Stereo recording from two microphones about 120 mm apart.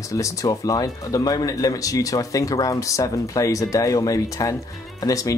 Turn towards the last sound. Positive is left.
turn(degrees=30)  # may be behind; listen again after turning